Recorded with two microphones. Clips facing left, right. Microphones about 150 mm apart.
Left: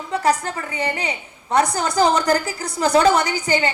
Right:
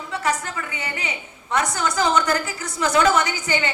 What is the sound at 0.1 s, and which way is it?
A woman's voice, 35° left (ahead or behind).